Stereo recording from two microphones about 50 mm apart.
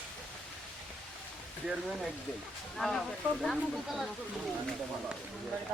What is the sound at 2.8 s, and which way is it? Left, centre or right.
Speech, centre.